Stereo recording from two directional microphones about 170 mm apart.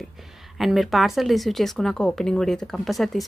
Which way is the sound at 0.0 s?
Centre (ahead or behind).